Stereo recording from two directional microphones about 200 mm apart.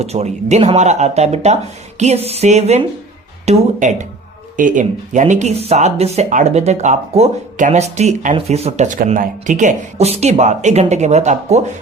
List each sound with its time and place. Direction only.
0.0 s speech: 30° right (ahead or behind)